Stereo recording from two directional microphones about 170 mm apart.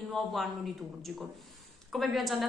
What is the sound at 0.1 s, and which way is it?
Speech, centre (ahead or behind).